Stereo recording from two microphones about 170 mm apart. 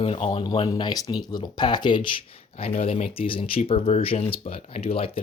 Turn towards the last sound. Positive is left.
turn(degrees=35)  # may be behind; listen again after turning